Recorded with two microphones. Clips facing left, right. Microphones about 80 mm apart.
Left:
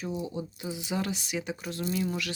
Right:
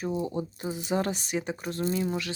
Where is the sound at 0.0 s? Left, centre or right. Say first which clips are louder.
Right 4 dB; right.